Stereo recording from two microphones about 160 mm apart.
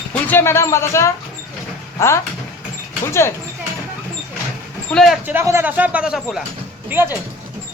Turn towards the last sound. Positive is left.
turn(degrees=-15)  # may be behind; listen again after turning